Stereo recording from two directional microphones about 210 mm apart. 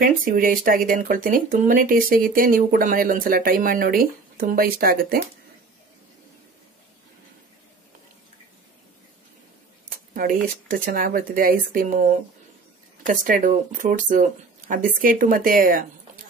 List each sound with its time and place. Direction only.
0.0 s speech: 40° right (ahead or behind)
9.8 s speech: 40° right (ahead or behind)
13.0 s speech: 40° right (ahead or behind)